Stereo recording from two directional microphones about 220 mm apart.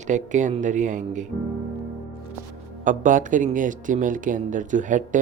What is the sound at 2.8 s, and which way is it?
Speech, 35° right (ahead or behind).